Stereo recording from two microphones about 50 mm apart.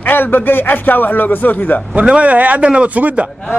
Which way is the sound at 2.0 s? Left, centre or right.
Right.